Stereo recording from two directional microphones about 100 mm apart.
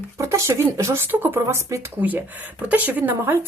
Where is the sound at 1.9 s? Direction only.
20° right (ahead or behind).